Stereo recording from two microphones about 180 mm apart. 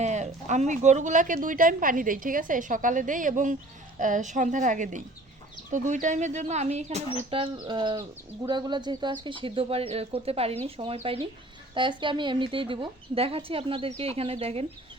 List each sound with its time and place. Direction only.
0.0 s a woman's voice: 40° right (ahead or behind)